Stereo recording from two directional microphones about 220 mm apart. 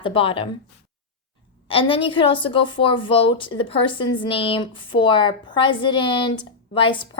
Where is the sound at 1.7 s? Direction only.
25° left (ahead or behind).